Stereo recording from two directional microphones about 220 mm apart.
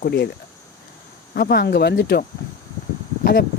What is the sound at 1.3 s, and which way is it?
Speech, 45° left (ahead or behind).